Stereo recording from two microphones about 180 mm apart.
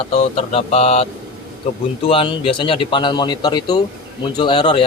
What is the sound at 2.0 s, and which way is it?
Speech, 30° left (ahead or behind).